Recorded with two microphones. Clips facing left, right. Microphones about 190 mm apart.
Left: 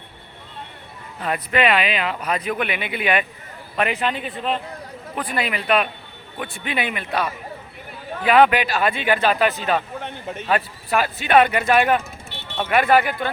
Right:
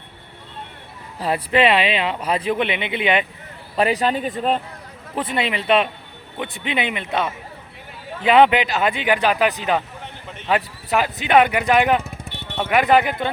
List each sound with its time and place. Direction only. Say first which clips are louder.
1.2 s speech: right 3 dB; 30° right (ahead or behind)
3.8 s speech: right 4 dB; 35° right (ahead or behind)
5.1 s speech: right 2 dB; 25° right (ahead or behind)